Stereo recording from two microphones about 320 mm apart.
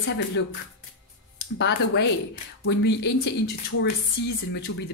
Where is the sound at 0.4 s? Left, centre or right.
Left.